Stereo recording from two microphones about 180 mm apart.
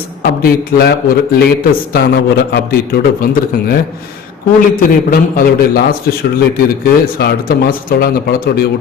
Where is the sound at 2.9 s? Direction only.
55° left (ahead or behind).